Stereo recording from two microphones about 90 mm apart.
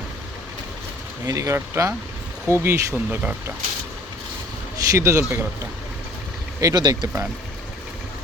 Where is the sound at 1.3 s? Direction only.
35° right (ahead or behind).